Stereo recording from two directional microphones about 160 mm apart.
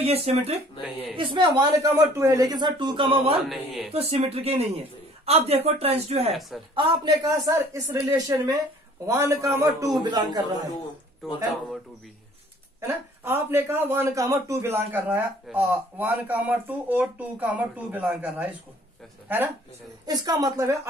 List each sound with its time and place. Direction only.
0.0 s a man's voice: 40° right (ahead or behind)
3.4 s speech: centre (ahead or behind)
3.9 s a man's voice: 40° right (ahead or behind)
6.7 s speech: 30° right (ahead or behind)
11.2 s speech: centre (ahead or behind)
12.8 s speech: 15° right (ahead or behind)
20.1 s speech: 25° right (ahead or behind)